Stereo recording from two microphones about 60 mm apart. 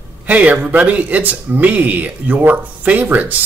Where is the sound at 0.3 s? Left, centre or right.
Right.